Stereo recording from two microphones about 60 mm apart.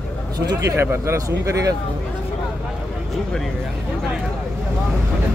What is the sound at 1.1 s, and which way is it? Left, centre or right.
Speech, right.